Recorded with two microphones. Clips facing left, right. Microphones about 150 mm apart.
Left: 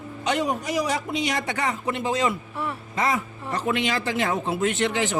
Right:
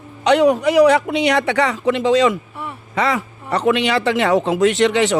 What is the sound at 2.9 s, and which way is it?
A man's voice, 70° right (ahead or behind).